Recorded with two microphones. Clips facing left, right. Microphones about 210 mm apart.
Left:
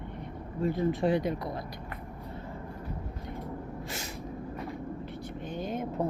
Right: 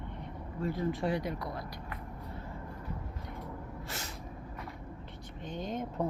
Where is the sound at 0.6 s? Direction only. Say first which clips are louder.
Left 5 dB; 20° left (ahead or behind).